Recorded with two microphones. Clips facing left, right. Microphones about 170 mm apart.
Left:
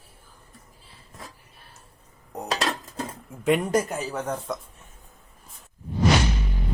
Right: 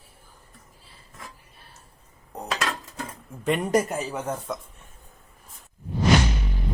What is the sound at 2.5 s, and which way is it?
Dishes, 35° left (ahead or behind).